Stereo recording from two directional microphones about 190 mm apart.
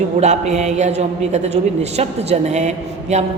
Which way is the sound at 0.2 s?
35° right (ahead or behind).